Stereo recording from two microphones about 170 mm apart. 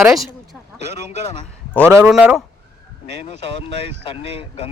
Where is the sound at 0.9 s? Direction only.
75° right (ahead or behind).